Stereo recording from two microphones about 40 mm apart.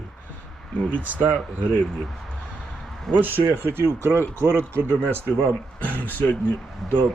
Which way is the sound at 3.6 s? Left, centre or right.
Right.